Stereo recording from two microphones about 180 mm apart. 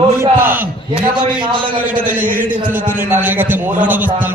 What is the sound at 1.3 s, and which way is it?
Speech, 25° right (ahead or behind).